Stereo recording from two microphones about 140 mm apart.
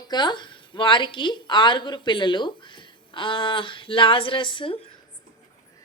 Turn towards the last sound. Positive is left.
turn(degrees=35)  # may be behind; listen again after turning